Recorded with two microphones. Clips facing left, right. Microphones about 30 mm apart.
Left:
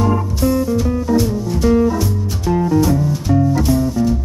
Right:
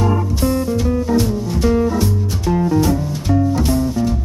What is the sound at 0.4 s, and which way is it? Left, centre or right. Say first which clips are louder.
Music: left 3 dB; centre.